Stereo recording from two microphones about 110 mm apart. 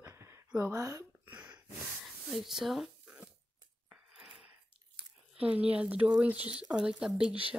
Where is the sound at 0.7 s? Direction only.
30° right (ahead or behind).